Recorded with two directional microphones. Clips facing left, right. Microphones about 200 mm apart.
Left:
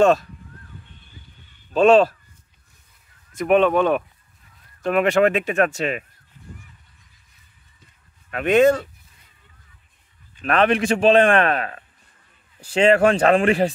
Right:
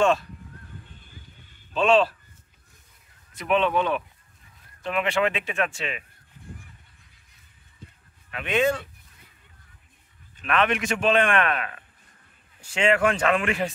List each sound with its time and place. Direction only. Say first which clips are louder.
1.7 s speech: left 6 dB; 45° left (ahead or behind)
3.3 s speech: left 6 dB; 45° left (ahead or behind)
8.3 s speech: left 8 dB; 45° left (ahead or behind)
10.4 s a man's voice: left 6 dB; 35° left (ahead or behind)